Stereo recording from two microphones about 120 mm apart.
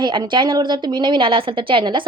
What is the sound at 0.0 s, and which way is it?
A woman's voice, 40° right (ahead or behind).